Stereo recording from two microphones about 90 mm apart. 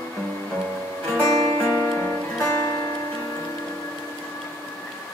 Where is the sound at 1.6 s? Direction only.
25° left (ahead or behind).